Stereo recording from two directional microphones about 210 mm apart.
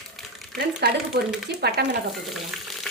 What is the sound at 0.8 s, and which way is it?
Speech, 50° right (ahead or behind).